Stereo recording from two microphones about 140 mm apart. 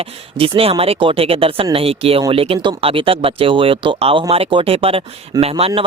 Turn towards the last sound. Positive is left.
turn(degrees=-40)  # may be behind; listen again after turning